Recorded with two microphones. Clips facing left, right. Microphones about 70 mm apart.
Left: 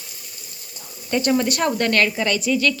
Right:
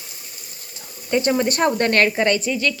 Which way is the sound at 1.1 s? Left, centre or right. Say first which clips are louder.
Right 2 dB; centre.